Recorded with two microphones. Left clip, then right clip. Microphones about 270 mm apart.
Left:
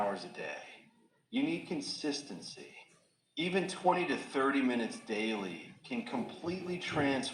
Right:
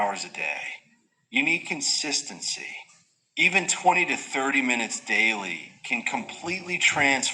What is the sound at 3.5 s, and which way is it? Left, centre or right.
Speech, right.